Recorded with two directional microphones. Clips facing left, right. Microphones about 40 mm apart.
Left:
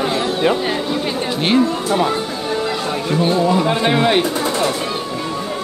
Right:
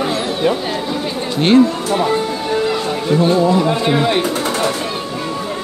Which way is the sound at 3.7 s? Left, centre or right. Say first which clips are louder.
Even; left.